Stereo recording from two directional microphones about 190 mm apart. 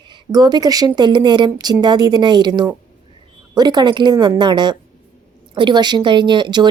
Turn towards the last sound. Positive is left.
turn(degrees=-25)  # may be behind; listen again after turning